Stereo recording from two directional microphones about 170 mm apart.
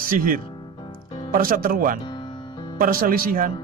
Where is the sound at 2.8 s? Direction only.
60° right (ahead or behind).